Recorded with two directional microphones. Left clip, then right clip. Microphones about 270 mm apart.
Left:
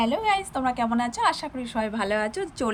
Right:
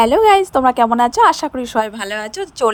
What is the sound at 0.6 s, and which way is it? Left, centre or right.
Speech, right.